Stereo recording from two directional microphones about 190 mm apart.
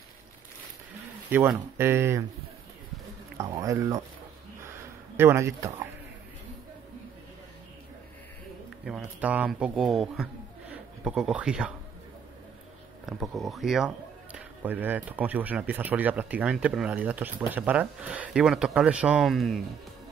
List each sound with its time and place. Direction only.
1.3 s speech: 10° right (ahead or behind)
3.3 s speech: 15° right (ahead or behind)
4.6 s a sound: 10° right (ahead or behind)
8.8 s speech: 5° right (ahead or behind)
13.0 s speech: centre (ahead or behind)